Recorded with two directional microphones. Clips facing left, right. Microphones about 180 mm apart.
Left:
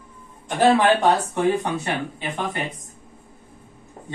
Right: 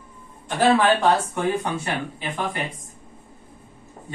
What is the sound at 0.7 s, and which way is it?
Speech, 20° left (ahead or behind).